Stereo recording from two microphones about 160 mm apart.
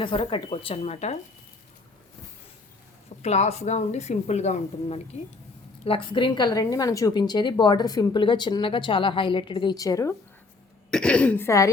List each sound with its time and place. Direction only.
0.0 s a woman's voice: 30° left (ahead or behind)
3.2 s a woman's voice: 45° left (ahead or behind)
5.8 s a woman's voice: 35° left (ahead or behind)
10.9 s a woman's voice: 5° left (ahead or behind)